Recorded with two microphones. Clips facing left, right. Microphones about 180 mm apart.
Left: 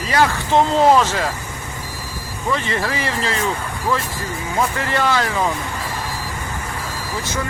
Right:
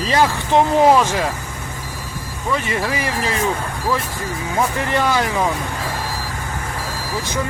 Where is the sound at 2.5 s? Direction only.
10° right (ahead or behind).